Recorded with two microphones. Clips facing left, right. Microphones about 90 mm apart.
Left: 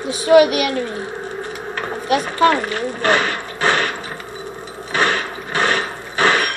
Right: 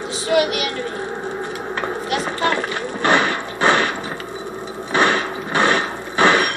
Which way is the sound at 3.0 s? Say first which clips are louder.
Right 1 dB; 20° right (ahead or behind).